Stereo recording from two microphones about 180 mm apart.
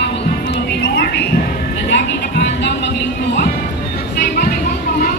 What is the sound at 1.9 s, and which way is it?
Music, 70° left (ahead or behind).